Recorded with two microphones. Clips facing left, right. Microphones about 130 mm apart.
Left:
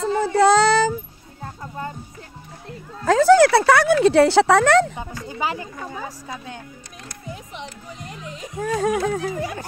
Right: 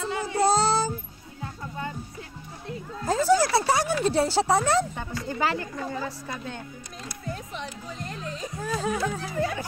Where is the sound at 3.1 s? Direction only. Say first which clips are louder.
Left 8 dB; 75° left (ahead or behind).